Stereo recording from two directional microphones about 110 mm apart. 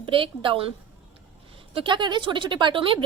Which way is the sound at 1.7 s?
50° right (ahead or behind).